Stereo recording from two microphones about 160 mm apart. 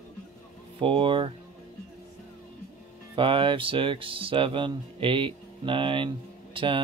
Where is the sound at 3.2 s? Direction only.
30° right (ahead or behind).